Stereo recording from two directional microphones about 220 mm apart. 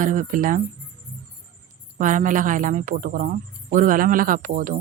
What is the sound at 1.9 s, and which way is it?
A woman's voice, 35° right (ahead or behind).